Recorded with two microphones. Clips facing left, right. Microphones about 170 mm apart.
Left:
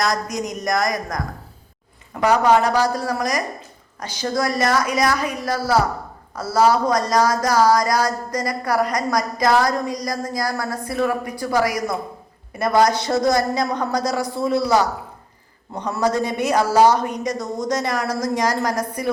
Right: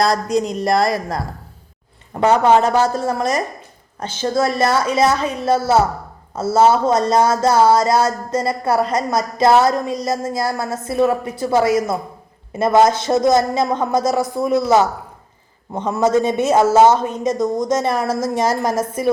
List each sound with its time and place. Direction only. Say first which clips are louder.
0.0 s speech: right 6 dB; 30° right (ahead or behind)
2.2 s speech: right 3 dB; 25° right (ahead or behind)